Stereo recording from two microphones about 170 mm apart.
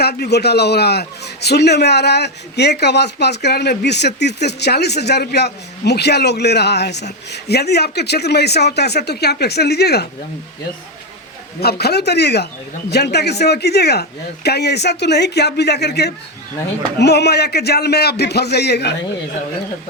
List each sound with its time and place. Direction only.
0.0 s a man's voice: 70° left (ahead or behind)
11.6 s a man's voice: 70° left (ahead or behind)